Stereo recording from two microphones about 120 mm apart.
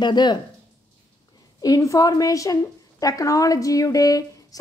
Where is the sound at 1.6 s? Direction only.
30° left (ahead or behind).